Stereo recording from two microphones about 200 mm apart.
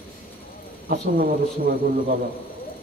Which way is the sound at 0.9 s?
45° right (ahead or behind).